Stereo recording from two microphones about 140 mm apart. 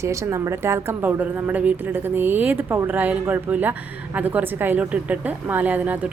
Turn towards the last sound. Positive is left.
turn(degrees=-10)  # may be behind; listen again after turning